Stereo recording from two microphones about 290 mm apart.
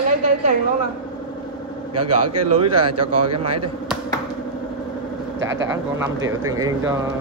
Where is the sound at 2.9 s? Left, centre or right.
Right.